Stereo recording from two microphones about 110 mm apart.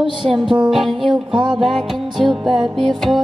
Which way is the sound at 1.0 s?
45° right (ahead or behind).